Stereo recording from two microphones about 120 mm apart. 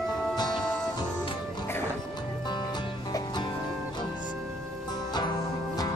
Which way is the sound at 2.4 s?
40° left (ahead or behind).